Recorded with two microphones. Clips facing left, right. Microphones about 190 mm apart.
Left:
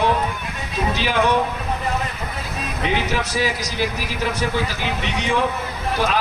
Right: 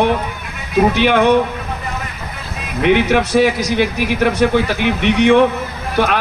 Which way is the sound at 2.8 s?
65° right (ahead or behind).